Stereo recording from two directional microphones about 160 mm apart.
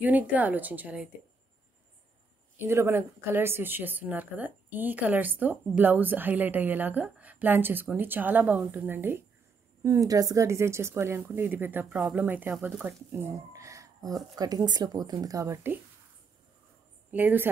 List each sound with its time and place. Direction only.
0.0 s a woman's voice: 10° right (ahead or behind)
2.6 s a woman's voice: 15° right (ahead or behind)
17.1 s a woman's voice: 10° right (ahead or behind)